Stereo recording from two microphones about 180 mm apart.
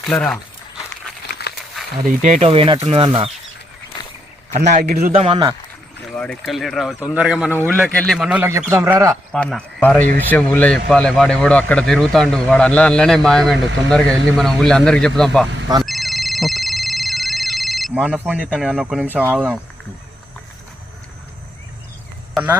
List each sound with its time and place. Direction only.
0.0 s speech: 5° left (ahead or behind)
1.3 s a sound: 65° left (ahead or behind)
2.0 s speech: 45° right (ahead or behind)
4.7 s a man's voice: 45° right (ahead or behind)
5.1 s speech: 30° right (ahead or behind)
6.1 s speech: 5° left (ahead or behind)
7.9 s speech: centre (ahead or behind); by 9.1 s 15° right (ahead or behind)
9.3 s speech: 5° left (ahead or behind)
15.8 s a sound: centre (ahead or behind)
19.1 s speech: 10° right (ahead or behind)